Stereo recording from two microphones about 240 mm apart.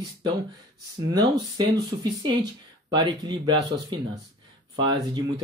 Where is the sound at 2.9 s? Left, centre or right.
Centre.